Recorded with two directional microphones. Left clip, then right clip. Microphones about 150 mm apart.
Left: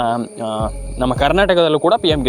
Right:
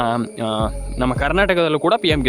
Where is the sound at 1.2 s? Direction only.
15° left (ahead or behind).